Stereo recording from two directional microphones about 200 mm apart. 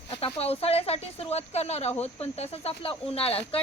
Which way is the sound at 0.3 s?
30° left (ahead or behind).